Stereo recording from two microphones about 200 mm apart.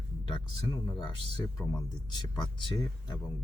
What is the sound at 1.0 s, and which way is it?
Speech, 25° left (ahead or behind).